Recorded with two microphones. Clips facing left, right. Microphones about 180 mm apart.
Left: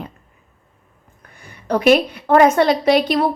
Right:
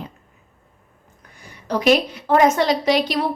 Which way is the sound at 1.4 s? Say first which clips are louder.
Left 3 dB; 55° left (ahead or behind).